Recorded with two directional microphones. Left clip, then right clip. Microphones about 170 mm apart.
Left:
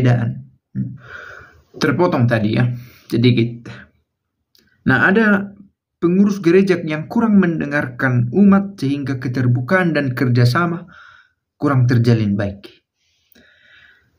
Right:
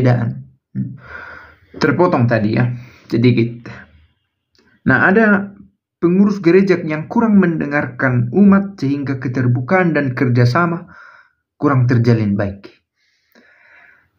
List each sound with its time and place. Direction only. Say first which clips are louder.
0.0 s speech: right 3 dB; 10° left (ahead or behind)
0.7 s a sound: right 1 dB; 15° left (ahead or behind)
1.8 s speech: right 2 dB; 20° left (ahead or behind)
4.8 s speech: right 2 dB; 15° left (ahead or behind)
13.3 s wheeze: right 2 dB; 10° left (ahead or behind)